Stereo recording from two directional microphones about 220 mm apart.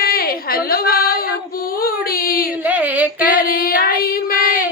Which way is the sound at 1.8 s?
40° left (ahead or behind).